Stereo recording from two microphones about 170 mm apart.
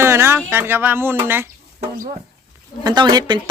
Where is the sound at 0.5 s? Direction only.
15° right (ahead or behind).